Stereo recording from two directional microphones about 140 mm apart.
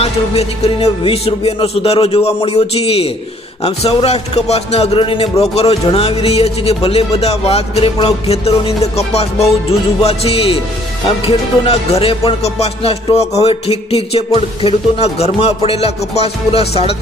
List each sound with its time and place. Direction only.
0.0 s speech: 45° left (ahead or behind)